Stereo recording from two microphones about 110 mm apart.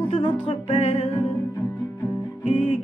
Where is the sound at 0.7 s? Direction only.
75° left (ahead or behind).